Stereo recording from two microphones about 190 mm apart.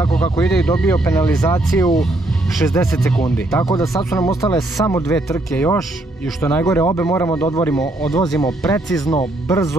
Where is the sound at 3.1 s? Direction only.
5° left (ahead or behind).